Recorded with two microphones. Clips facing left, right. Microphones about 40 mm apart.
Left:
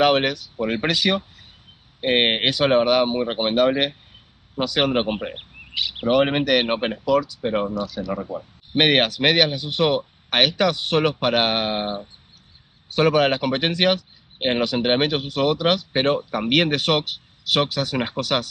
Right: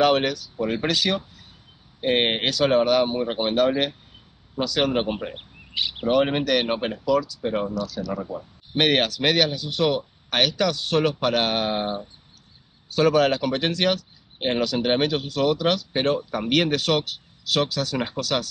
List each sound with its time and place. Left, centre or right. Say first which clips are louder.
0.0 s speech: left 1 dB; left
8.1 s speech: left 2 dB; centre; by 18.5 s left